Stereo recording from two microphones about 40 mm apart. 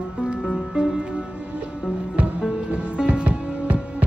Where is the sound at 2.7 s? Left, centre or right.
Right.